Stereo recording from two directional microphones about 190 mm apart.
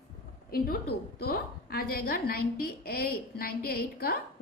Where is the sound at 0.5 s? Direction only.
55° left (ahead or behind).